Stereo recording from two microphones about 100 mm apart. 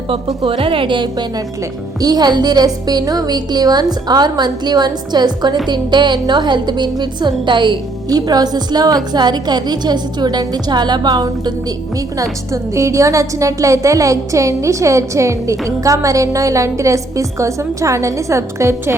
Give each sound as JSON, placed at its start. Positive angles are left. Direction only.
{"t": 0.4, "sound": "a woman's voice", "side_deg": -65}
{"t": 2.0, "sound": "a woman's voice", "side_deg": -40}
{"t": 12.7, "sound": "a woman's voice", "side_deg": -30}